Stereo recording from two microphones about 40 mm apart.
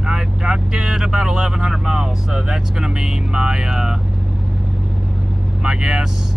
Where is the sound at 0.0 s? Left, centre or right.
Centre.